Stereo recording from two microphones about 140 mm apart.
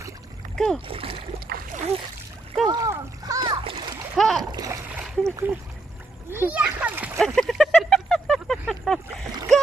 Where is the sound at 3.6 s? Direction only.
40° right (ahead or behind).